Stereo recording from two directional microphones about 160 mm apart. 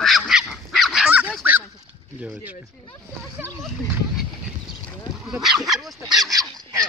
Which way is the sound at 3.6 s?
Centre (ahead or behind).